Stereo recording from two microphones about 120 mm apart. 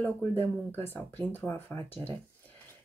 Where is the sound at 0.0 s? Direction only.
15° left (ahead or behind).